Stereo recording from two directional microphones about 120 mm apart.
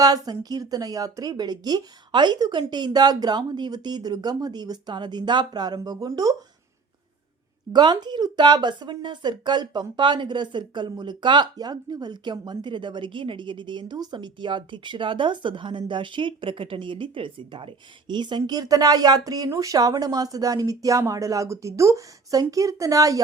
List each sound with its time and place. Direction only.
0.0 s speech: 35° right (ahead or behind)
7.7 s speech: 35° right (ahead or behind)